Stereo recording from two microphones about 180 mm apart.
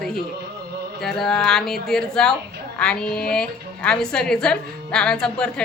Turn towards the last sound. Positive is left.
turn(degrees=5)  # may be behind; listen again after turning